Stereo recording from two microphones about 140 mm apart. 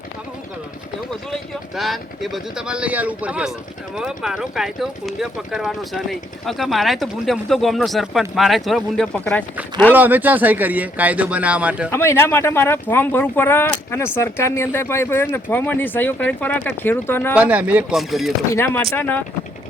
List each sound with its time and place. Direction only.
1.7 s speech: centre (ahead or behind)
9.9 s speech: 10° right (ahead or behind)
11.9 s speech: 15° left (ahead or behind)
17.3 s speech: 10° right (ahead or behind)
18.5 s speech: 15° left (ahead or behind)